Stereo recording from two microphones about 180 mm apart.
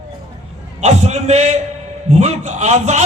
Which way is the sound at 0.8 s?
40° right (ahead or behind).